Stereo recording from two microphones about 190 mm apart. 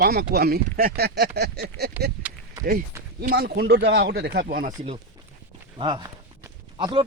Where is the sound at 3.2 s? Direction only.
55° right (ahead or behind).